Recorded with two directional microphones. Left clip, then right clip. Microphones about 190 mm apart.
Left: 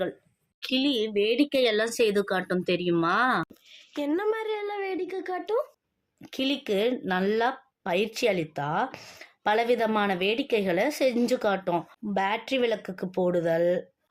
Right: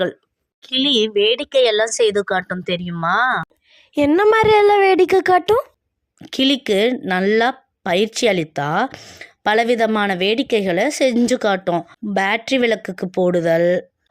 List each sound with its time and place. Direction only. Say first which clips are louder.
0.6 s a woman's voice: right 10 dB; 45° right (ahead or behind)
3.9 s a woman's voice: right 14 dB; 50° right (ahead or behind)
6.2 s a woman's voice: right 11 dB; 40° right (ahead or behind)
8.9 s a woman's voice: right 6 dB; 30° right (ahead or behind)